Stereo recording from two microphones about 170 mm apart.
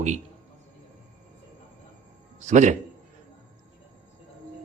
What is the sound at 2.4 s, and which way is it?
Speech, 45° right (ahead or behind).